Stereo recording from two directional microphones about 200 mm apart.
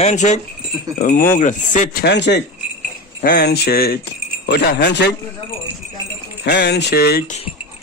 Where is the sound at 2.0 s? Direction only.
60° left (ahead or behind).